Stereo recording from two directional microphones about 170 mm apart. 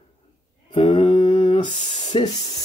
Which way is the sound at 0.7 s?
30° left (ahead or behind).